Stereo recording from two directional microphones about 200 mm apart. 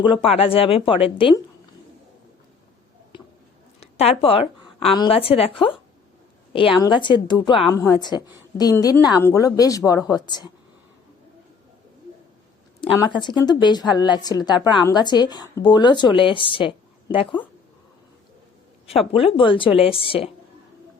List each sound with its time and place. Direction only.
0.0 s a woman's voice: 25° left (ahead or behind)
3.1 s squish: 25° left (ahead or behind)
3.8 s a woman's voice: 30° left (ahead or behind)
12.8 s a woman's voice: 20° left (ahead or behind)
18.9 s a woman's voice: 30° left (ahead or behind)